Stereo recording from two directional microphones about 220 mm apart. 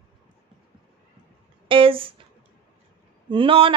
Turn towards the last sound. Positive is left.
turn(degrees=-25)  # may be behind; listen again after turning